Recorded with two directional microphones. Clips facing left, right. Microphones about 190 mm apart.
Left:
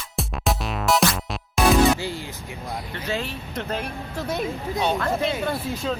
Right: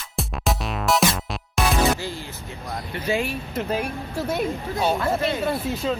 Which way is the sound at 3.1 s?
10° right (ahead or behind).